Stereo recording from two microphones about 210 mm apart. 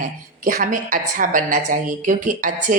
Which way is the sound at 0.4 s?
40° right (ahead or behind).